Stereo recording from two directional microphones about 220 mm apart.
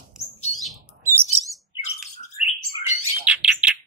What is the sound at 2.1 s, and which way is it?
Bird, 30° left (ahead or behind).